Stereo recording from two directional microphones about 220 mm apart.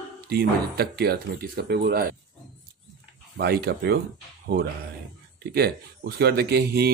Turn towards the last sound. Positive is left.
turn(degrees=-45)  # may be behind; listen again after turning